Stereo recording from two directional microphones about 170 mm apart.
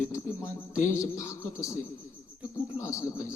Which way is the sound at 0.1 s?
15° left (ahead or behind).